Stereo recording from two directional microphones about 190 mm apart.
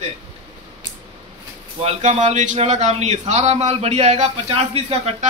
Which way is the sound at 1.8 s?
40° right (ahead or behind).